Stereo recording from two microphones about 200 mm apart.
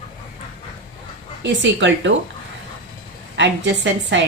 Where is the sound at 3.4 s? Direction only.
65° right (ahead or behind).